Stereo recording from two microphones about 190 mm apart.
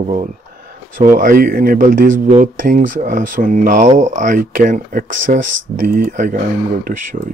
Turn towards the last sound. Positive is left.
turn(degrees=-45)  # may be behind; listen again after turning